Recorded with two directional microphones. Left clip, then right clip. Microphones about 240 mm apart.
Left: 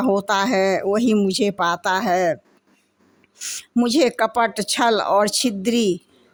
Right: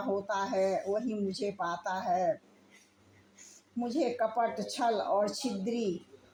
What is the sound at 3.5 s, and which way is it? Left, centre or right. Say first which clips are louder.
Speech: left 16 dB; left.